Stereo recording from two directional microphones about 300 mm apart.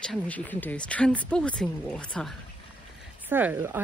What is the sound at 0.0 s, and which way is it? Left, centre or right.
Speech, centre.